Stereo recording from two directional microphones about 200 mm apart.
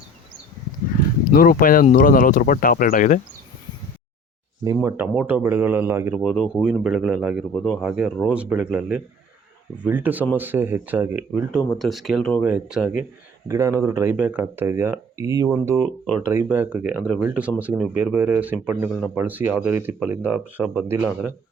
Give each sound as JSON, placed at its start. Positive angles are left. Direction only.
{"t": 0.9, "sound": "a sound", "side_deg": 40}
{"t": 1.3, "sound": "speech", "side_deg": 45}
{"t": 4.6, "sound": "speech", "side_deg": -15}
{"t": 6.1, "sound": "speech", "side_deg": 0}
{"t": 18.9, "sound": "speech", "side_deg": 0}